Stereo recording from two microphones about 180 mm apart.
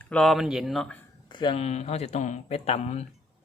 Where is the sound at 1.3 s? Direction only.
25° left (ahead or behind).